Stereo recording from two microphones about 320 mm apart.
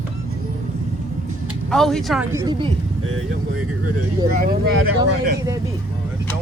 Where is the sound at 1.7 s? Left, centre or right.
Centre.